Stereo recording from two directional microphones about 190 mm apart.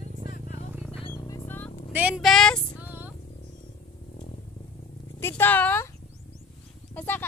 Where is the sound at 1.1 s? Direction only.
15° left (ahead or behind).